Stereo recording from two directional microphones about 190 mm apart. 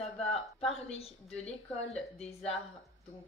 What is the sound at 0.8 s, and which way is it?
A woman's voice, 35° left (ahead or behind).